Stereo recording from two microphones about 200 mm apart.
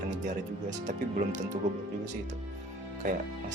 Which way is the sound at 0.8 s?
40° right (ahead or behind).